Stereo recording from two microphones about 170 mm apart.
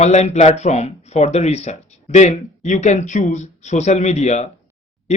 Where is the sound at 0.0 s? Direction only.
40° left (ahead or behind).